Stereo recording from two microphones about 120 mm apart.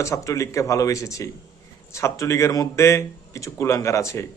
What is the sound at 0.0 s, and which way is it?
A man's voice, 25° left (ahead or behind).